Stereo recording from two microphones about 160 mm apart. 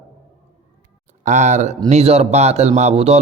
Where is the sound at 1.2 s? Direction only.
50° right (ahead or behind).